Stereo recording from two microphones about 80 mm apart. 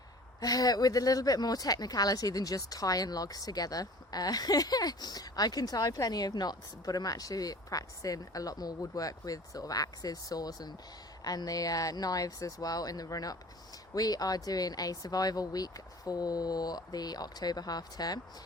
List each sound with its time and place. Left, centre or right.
0.3 s speech: left